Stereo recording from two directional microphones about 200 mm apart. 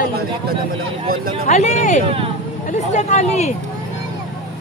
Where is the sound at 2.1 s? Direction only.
25° right (ahead or behind).